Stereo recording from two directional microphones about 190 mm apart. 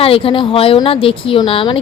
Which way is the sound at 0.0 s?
30° left (ahead or behind).